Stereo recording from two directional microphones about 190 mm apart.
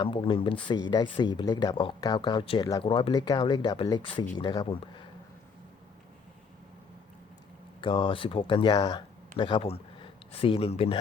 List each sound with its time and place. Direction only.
0.0 s speech: 25° left (ahead or behind)
7.8 s speech: 25° left (ahead or behind)